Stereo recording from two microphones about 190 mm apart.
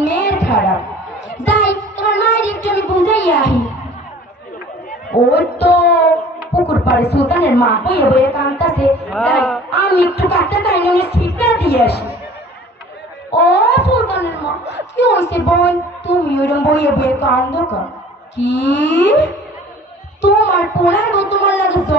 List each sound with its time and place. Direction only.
0.0 s music: 65° left (ahead or behind)
5.3 s a man's voice: 60° left (ahead or behind)
11.2 s music: 60° left (ahead or behind)
13.3 s a sound: 60° left (ahead or behind)
15.5 s a woman's voice: 65° left (ahead or behind)